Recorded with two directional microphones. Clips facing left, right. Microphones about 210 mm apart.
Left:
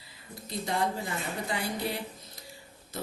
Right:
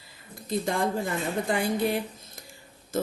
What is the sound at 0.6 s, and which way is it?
Speech, 50° right (ahead or behind).